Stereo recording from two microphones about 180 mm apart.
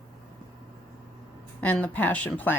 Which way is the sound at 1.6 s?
10° left (ahead or behind).